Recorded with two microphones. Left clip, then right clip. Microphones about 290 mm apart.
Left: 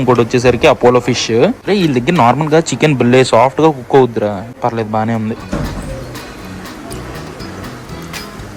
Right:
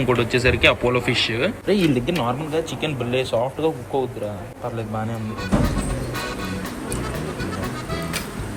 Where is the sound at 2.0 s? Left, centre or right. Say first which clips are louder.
Left 12 dB; left.